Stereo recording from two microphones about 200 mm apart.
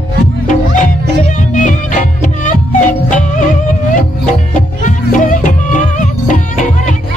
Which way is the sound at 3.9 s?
40° left (ahead or behind).